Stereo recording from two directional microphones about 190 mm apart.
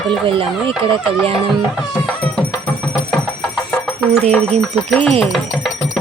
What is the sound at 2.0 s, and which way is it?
Music, 5° left (ahead or behind).